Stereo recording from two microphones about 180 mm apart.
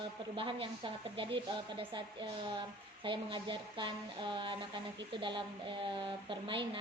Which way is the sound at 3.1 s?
25° right (ahead or behind).